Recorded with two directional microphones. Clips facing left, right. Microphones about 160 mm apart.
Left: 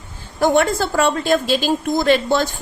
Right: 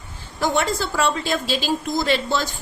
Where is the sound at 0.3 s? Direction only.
55° left (ahead or behind).